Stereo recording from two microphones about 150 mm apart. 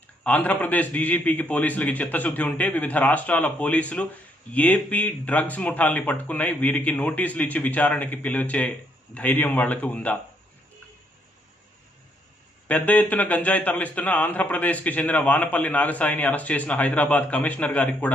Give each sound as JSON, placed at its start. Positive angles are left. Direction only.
{"t": 0.2, "sound": "a man's voice", "side_deg": 10}
{"t": 12.6, "sound": "a man's voice", "side_deg": 10}